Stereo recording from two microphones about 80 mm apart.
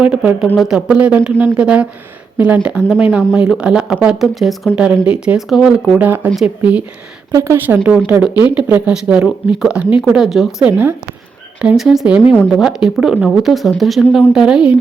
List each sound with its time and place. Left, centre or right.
0.0 s speech: centre
4.7 s speech: centre
6.0 s speech: right
7.3 s speech: right
7.9 s speech: centre
10.7 s speech: right
11.8 s speech: centre